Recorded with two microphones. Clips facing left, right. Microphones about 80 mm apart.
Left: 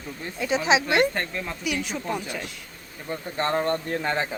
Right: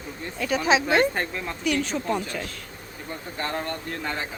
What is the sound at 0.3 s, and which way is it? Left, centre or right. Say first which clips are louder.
Speech: even; centre.